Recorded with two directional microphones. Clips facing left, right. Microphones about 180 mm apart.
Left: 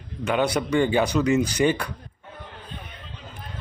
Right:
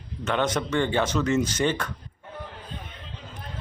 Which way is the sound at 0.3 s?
10° left (ahead or behind).